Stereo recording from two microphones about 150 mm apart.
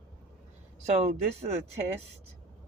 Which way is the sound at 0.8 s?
45° right (ahead or behind).